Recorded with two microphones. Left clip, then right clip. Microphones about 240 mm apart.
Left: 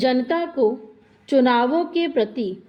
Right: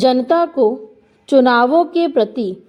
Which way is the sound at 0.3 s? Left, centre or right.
Right.